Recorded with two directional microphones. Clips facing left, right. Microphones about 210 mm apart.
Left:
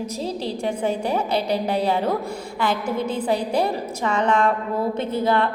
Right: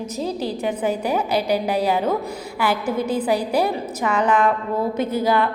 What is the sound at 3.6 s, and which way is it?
Speech, 5° right (ahead or behind).